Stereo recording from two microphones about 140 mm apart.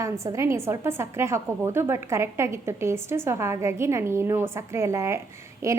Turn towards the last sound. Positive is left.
turn(degrees=-20)  # may be behind; listen again after turning